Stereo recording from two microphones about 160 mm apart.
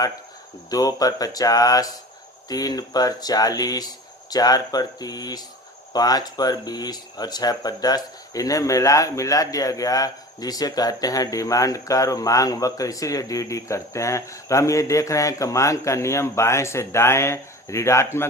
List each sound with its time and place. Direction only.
0.7 s speech: 25° left (ahead or behind)